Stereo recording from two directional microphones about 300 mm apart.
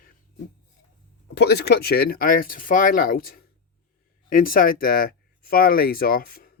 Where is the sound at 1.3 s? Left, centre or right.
Left.